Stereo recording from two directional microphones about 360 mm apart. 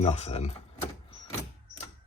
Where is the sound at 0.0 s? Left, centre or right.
Centre.